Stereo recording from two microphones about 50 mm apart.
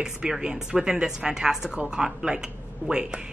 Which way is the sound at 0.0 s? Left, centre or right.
Centre.